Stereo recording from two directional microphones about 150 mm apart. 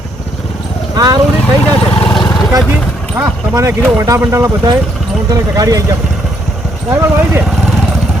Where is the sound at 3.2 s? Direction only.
15° right (ahead or behind).